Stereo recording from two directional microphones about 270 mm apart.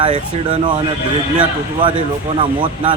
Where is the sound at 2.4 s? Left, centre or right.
Centre.